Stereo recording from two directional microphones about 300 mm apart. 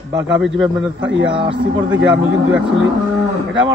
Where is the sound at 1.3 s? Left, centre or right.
Centre.